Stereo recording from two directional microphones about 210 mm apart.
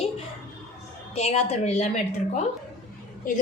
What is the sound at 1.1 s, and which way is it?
A woman's voice, 30° left (ahead or behind).